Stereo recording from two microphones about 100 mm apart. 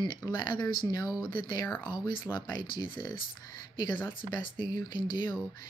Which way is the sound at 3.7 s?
50° left (ahead or behind).